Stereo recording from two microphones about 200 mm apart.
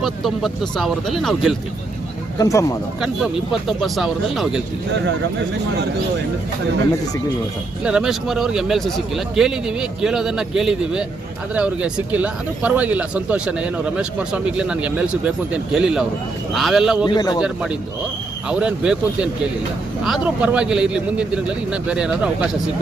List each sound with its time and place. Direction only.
0.0 s speech: centre (ahead or behind)
2.4 s speech: 15° left (ahead or behind)
3.5 s speech: centre (ahead or behind)
7.9 s speech: 5° right (ahead or behind)
17.1 s a man's voice: 20° left (ahead or behind)
17.4 s speech: 5° right (ahead or behind)